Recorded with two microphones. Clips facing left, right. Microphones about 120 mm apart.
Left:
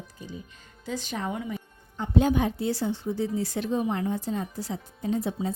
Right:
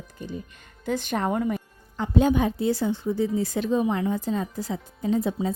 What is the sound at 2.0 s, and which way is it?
Speech, 90° right.